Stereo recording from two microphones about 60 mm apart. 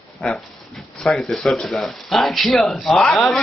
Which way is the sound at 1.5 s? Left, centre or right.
Centre.